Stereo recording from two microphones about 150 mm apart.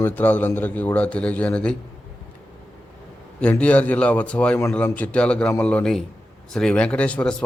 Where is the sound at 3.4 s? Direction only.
10° left (ahead or behind).